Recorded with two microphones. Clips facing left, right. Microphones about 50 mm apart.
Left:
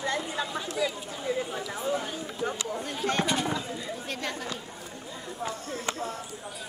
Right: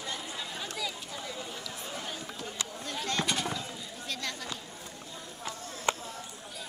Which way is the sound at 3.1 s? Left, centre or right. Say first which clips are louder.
Left 5 dB; left.